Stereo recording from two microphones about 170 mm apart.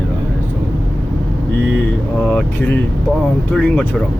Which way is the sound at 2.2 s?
10° left (ahead or behind).